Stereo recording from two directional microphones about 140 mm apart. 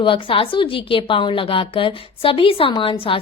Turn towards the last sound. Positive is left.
turn(degrees=40)  # may be behind; listen again after turning